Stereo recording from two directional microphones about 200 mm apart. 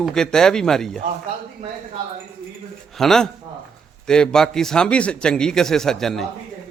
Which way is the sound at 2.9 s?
Centre (ahead or behind).